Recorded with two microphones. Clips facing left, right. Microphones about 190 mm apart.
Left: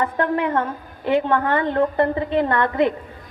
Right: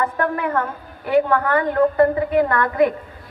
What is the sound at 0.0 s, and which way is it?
A woman's voice, 20° left (ahead or behind).